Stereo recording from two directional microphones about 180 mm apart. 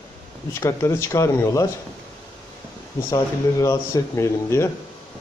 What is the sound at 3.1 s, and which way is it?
Speech, 20° left (ahead or behind).